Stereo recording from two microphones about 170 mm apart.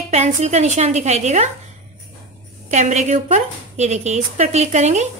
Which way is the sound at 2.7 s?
45° right (ahead or behind).